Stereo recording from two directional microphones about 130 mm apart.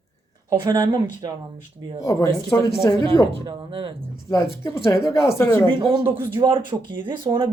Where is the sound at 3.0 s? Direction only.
40° right (ahead or behind).